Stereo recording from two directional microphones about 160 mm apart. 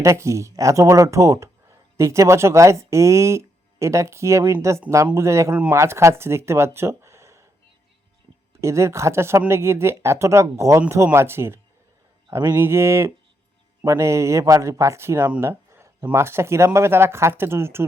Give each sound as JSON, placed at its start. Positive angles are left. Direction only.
{"t": 0.0, "sound": "speech", "side_deg": -20}
{"t": 8.6, "sound": "speech", "side_deg": -20}